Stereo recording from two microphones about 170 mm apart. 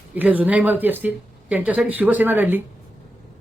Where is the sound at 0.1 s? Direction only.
10° right (ahead or behind).